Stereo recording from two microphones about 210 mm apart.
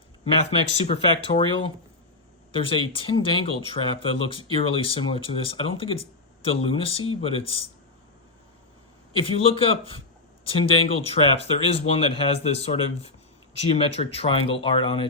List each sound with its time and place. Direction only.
0.9 s speech: 25° left (ahead or behind)
9.1 s speech: 25° left (ahead or behind)